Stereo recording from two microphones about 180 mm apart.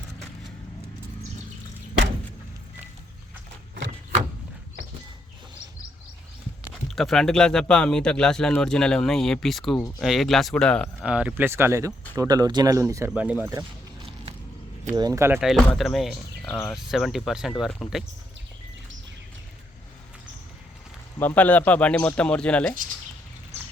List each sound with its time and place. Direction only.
6.7 s speech: centre (ahead or behind)
11.1 s speech: 5° right (ahead or behind)
14.9 s speech: 20° right (ahead or behind)
15.4 s speech: centre (ahead or behind)
21.2 s speech: 10° left (ahead or behind)